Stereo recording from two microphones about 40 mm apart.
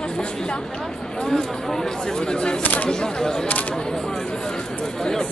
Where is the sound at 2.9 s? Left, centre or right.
Centre.